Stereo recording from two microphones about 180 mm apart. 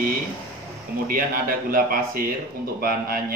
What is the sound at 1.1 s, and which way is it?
A man's voice, 55° right (ahead or behind).